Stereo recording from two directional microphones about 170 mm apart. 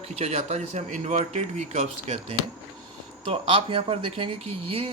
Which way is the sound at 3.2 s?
30° right (ahead or behind).